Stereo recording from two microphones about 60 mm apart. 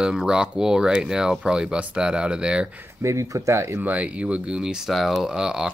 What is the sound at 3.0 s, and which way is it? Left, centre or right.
Speech, right.